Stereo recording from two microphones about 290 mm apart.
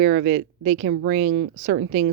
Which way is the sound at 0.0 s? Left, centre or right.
Right.